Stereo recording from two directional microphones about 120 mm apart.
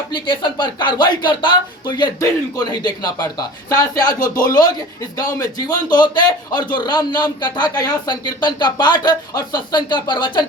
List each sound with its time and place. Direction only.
0.1 s speech: 40° left (ahead or behind)
2.6 s speech: 35° left (ahead or behind)